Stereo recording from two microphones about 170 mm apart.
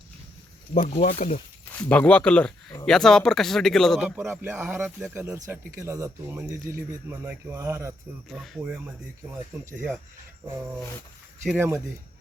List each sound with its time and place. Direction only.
0.7 s speech: 40° left (ahead or behind)
1.7 s speech: 10° left (ahead or behind); by 7.9 s 15° right (ahead or behind)
8.3 s speech: centre (ahead or behind)
8.6 s speech: 10° right (ahead or behind)